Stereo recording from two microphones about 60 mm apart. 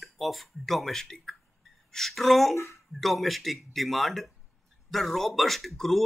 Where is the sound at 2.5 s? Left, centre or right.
Left.